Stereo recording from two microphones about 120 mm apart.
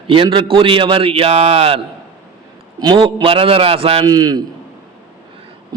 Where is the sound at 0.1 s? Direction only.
45° right (ahead or behind).